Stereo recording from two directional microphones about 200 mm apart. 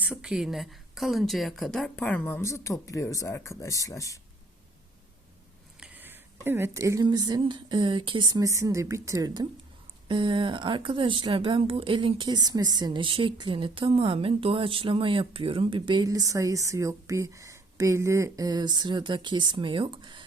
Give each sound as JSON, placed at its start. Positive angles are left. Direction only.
{"t": 0.0, "sound": "a woman's voice", "side_deg": -5}
{"t": 5.8, "sound": "a woman's voice", "side_deg": -10}